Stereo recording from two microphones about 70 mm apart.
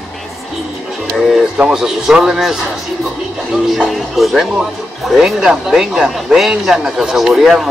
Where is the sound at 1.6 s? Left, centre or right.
Centre.